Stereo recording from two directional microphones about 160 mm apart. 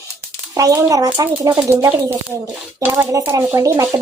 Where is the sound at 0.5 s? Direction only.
20° right (ahead or behind).